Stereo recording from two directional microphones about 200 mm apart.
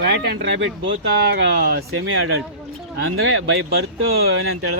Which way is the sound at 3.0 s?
90° right.